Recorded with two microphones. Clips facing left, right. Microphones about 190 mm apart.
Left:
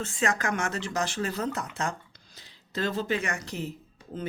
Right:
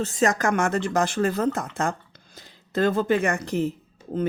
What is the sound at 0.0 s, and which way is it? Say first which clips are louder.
Speech: right 6 dB; 40° right (ahead or behind).